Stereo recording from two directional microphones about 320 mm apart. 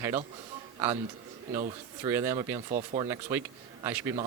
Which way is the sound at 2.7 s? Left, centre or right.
Right.